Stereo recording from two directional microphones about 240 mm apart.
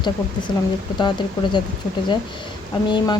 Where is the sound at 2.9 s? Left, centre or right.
Centre.